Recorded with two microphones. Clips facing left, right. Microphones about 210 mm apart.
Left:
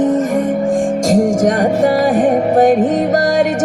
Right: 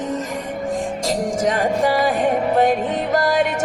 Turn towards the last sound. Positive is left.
turn(degrees=45)  # may be behind; listen again after turning